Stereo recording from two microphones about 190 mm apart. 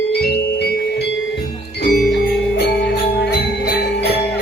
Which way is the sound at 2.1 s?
65° left (ahead or behind).